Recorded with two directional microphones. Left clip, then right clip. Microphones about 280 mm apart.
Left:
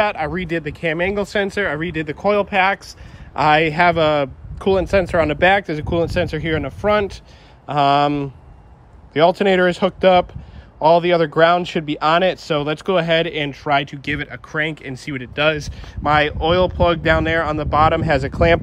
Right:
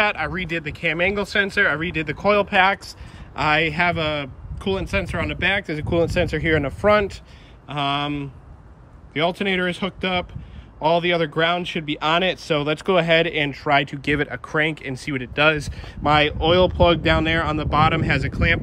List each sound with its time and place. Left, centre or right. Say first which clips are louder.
0.0 s speech: left 2 dB; centre
0.3 s speech: left 3 dB; left
0.9 s speech: even; centre